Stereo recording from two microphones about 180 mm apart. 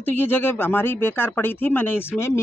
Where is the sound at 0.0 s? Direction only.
10° left (ahead or behind).